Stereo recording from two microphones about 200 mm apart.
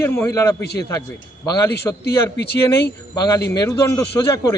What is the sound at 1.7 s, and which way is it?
Speech, 55° left (ahead or behind).